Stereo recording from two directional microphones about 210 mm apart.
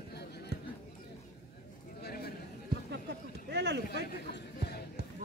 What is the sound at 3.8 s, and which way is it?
Speech, 50° left (ahead or behind).